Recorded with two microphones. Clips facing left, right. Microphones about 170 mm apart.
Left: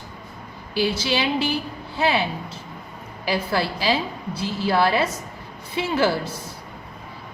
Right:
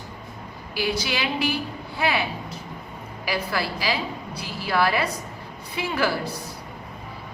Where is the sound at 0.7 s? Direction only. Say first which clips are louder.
Left 4 dB; 30° left (ahead or behind).